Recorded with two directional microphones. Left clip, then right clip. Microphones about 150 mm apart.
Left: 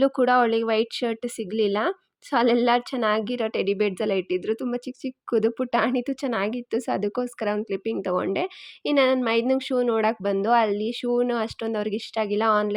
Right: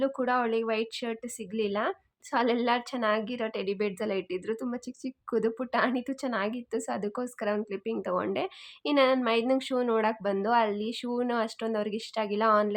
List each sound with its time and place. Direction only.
0.0 s a woman's voice: 40° left (ahead or behind)